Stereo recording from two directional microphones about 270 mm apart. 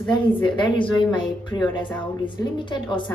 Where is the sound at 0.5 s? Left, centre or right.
Centre.